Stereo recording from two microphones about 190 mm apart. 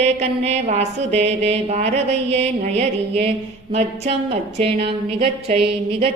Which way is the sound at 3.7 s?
35° right (ahead or behind).